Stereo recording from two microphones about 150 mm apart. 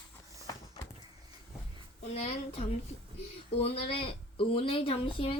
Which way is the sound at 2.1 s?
45° left (ahead or behind).